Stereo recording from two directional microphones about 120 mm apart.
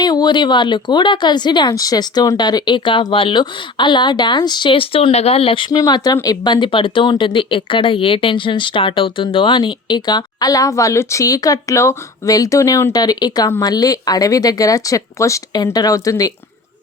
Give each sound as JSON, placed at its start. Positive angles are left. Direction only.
{"t": 0.0, "sound": "speech", "side_deg": 35}
{"t": 5.7, "sound": "speech", "side_deg": 30}